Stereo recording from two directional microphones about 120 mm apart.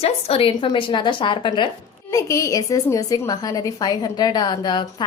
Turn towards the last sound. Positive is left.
turn(degrees=35)  # may be behind; listen again after turning